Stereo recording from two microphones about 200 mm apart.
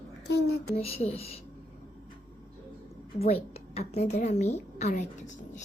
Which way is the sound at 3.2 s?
30° left (ahead or behind).